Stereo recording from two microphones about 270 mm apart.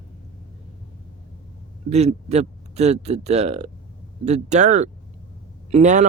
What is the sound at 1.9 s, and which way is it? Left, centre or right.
A man's voice, right.